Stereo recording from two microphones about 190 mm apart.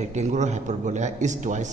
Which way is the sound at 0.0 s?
40° right (ahead or behind).